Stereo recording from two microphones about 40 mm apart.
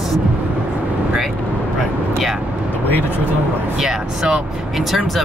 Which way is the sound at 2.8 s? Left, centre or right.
Left.